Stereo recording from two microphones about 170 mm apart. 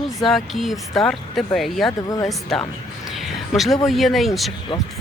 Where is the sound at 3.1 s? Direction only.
Centre (ahead or behind).